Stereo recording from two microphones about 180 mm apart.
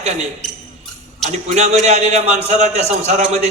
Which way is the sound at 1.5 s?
40° right (ahead or behind).